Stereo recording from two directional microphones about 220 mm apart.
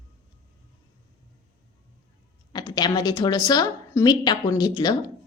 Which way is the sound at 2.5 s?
20° left (ahead or behind).